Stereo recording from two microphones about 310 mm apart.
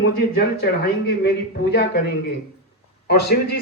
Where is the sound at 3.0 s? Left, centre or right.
Left.